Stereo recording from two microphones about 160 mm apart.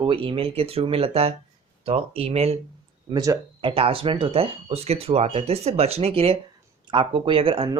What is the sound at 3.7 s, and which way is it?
Speech, 35° right (ahead or behind).